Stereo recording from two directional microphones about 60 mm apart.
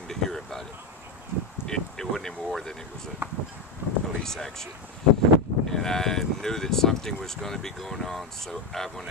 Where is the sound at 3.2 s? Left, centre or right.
Right.